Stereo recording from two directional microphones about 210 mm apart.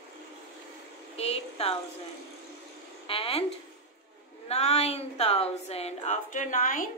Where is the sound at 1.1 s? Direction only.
30° left (ahead or behind).